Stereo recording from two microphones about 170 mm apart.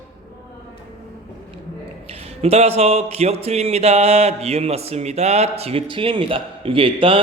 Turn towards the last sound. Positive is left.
turn(degrees=-30)  # may be behind; listen again after turning